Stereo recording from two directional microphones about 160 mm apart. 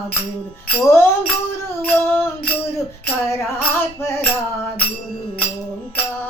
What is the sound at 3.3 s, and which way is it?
Speech, 15° left (ahead or behind).